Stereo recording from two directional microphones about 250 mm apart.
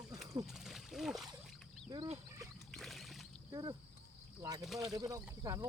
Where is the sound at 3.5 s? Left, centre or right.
Centre.